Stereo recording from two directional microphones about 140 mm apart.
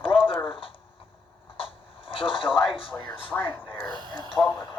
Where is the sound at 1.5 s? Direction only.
40° left (ahead or behind).